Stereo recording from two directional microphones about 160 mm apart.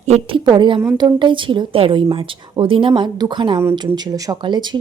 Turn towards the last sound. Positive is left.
turn(degrees=-30)  # may be behind; listen again after turning